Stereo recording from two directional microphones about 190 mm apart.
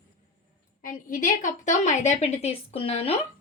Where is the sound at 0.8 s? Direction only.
45° left (ahead or behind).